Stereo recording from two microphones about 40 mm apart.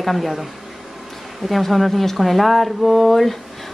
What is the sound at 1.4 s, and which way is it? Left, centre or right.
A woman's voice, centre.